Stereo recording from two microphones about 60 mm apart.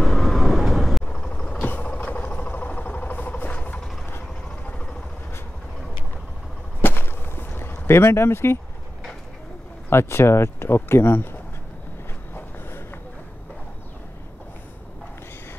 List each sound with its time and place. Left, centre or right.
0.0 s vehicle: centre
1.0 s vehicle: centre
1.7 s vehicle: left
6.8 s a sound: left
9.8 s speech: left
12.4 s a sound: left